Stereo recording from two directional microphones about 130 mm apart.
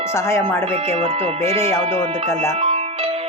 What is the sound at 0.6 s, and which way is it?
Speech, 50° right (ahead or behind).